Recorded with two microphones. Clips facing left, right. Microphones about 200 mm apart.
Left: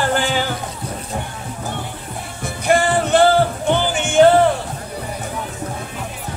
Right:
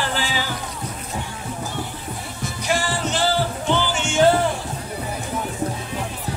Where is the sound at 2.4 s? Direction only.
55° left (ahead or behind).